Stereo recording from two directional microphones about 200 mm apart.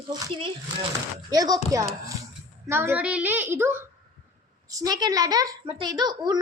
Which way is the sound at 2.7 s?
10° right (ahead or behind).